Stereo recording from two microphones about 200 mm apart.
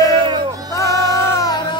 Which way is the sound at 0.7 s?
15° left (ahead or behind).